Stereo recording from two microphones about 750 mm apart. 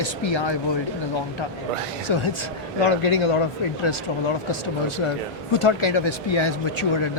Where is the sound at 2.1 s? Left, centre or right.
Left.